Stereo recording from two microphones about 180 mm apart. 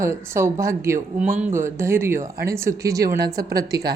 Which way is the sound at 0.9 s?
50° right (ahead or behind).